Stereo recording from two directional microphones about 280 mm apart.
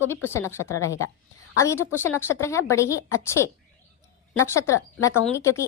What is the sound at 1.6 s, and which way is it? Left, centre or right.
A woman's voice, centre.